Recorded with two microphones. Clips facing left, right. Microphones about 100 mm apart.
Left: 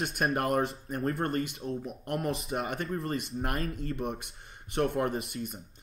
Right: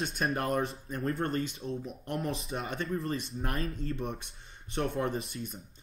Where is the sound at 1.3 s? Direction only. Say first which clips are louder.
Left 1 dB; 55° left (ahead or behind).